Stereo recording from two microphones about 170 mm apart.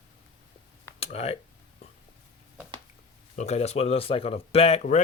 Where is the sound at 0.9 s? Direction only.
35° left (ahead or behind).